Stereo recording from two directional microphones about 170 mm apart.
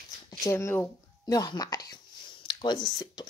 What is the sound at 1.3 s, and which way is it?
Speech, 25° left (ahead or behind).